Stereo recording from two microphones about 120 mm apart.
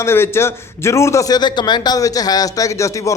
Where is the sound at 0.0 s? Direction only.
20° left (ahead or behind).